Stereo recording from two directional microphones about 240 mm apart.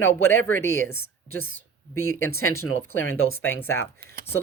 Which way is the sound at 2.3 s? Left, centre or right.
Left.